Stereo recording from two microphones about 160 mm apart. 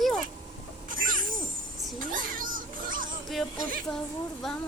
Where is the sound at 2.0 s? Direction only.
60° right (ahead or behind).